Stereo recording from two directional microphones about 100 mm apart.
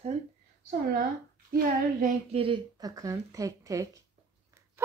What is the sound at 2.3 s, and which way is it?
Speech, 60° right (ahead or behind).